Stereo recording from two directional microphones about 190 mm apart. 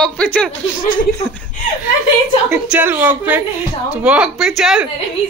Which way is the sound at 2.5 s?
5° right (ahead or behind).